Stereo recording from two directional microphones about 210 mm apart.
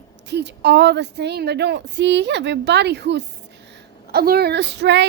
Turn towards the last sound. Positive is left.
turn(degrees=-55)  # may be behind; listen again after turning